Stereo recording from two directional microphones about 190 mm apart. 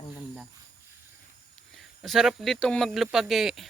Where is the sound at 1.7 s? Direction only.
Centre (ahead or behind).